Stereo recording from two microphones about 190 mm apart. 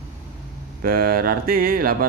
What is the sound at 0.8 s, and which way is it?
Speech, 50° right (ahead or behind).